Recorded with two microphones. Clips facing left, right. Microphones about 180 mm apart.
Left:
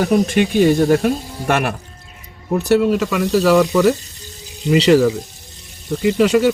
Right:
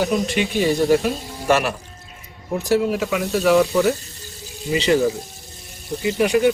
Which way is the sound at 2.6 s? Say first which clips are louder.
Left 4 dB; 70° left (ahead or behind).